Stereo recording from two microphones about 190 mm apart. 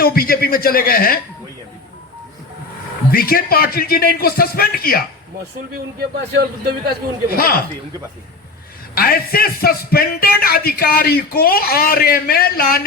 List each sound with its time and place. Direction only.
0.0 s a man's voice: 50° left (ahead or behind)
3.1 s a man's voice: 50° left (ahead or behind)
6.0 s a man's voice: 65° right (ahead or behind)
7.3 s a man's voice: 50° left (ahead or behind)
9.0 s a man's voice: 50° left (ahead or behind)